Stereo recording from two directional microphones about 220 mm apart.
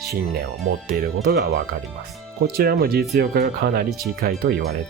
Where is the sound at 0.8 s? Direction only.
40° right (ahead or behind).